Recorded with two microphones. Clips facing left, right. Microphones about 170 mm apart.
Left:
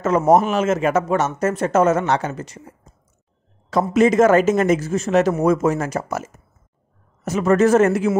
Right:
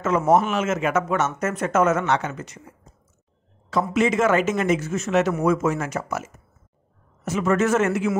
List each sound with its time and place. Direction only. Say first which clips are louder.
0.0 s speech: left 4 dB; 40° left (ahead or behind)
3.9 s speech: left 6 dB; 40° left (ahead or behind)